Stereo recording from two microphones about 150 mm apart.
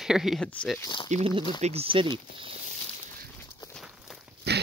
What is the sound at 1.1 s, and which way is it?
Speech, 50° right (ahead or behind).